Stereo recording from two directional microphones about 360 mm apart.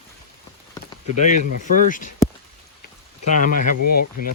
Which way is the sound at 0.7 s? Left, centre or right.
Centre.